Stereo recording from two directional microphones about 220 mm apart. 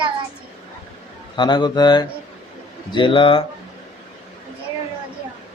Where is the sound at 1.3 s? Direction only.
20° left (ahead or behind).